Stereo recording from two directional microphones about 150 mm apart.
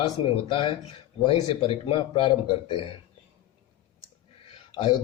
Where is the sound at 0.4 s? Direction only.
35° left (ahead or behind).